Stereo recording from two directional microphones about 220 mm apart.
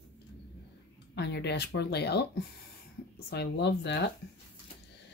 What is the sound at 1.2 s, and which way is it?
Speech, 50° left (ahead or behind).